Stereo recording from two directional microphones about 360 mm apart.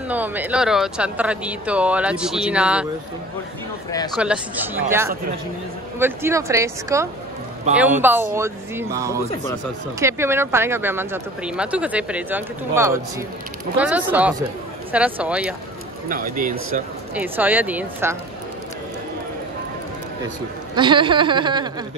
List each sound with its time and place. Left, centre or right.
0.1 s speech: centre
3.9 s speech: centre
4.2 s speech: centre
16.1 s a man's voice: right
17.1 s speech: centre
20.7 s speech: centre